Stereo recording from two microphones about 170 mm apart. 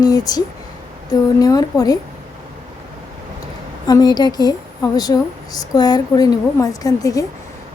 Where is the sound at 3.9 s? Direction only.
25° left (ahead or behind).